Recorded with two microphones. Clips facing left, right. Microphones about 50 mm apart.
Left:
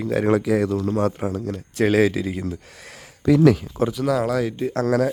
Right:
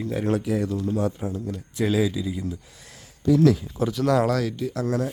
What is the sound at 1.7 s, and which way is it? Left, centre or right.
Speech, left.